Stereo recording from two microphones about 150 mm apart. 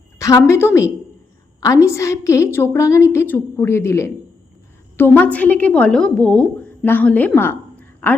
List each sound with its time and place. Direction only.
0.2 s a woman's voice: 20° left (ahead or behind)